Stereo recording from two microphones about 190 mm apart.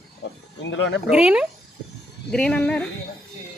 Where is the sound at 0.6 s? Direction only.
75° left (ahead or behind).